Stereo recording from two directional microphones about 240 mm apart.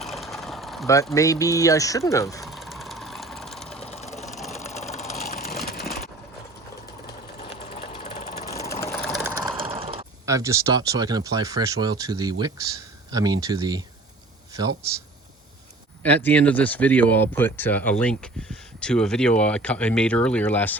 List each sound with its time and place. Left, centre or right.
0.0 s vehicle: centre
0.9 s speech: centre
2.4 s vehicle: centre
3.8 s sewing machine: left
4.3 s sewing machine: centre
4.6 s vehicle: left
7.5 s sewing machine: left
8.6 s vehicle: centre
9.1 s vehicle: centre
9.6 s mechanisms: right
10.2 s speech: centre
16.0 s speech: centre